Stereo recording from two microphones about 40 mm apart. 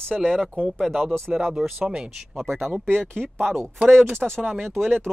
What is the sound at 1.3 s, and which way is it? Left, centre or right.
Speech, right.